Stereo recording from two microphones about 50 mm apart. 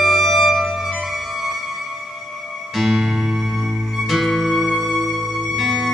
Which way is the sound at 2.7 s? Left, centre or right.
Centre.